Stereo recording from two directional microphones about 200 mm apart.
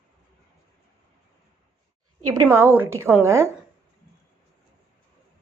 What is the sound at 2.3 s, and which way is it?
A woman's voice, 15° right (ahead or behind).